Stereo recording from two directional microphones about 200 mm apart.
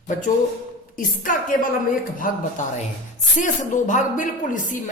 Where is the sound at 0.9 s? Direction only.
40° left (ahead or behind).